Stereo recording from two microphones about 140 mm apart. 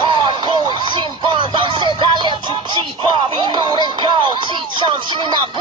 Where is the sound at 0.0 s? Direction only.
35° right (ahead or behind).